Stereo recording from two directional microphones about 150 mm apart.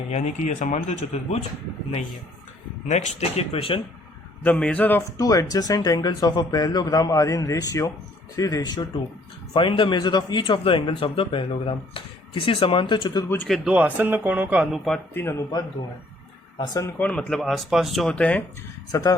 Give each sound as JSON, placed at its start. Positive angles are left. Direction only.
{"t": 0.1, "sound": "speech", "side_deg": 50}
{"t": 2.8, "sound": "speech", "side_deg": 50}
{"t": 4.4, "sound": "speech", "side_deg": 10}
{"t": 5.1, "sound": "speech", "side_deg": 25}
{"t": 13.5, "sound": "speech", "side_deg": -5}
{"t": 15.1, "sound": "speech", "side_deg": 15}
{"t": 16.6, "sound": "speech", "side_deg": 25}
{"t": 17.0, "sound": "speech", "side_deg": 10}
{"t": 18.9, "sound": "speech", "side_deg": 25}